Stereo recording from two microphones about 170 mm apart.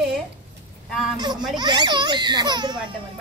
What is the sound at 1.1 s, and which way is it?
A child's voice, 25° right (ahead or behind).